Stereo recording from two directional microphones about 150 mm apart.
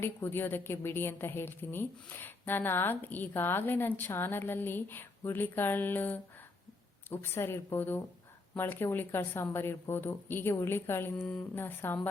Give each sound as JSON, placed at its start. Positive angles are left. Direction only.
{"t": 0.0, "sound": "a woman's voice", "side_deg": 15}